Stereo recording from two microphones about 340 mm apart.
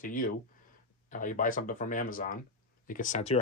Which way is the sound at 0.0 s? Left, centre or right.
Left.